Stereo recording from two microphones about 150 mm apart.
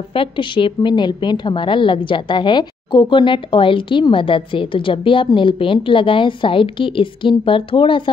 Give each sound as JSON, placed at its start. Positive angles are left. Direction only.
{"t": 0.1, "sound": "a woman's voice", "side_deg": 35}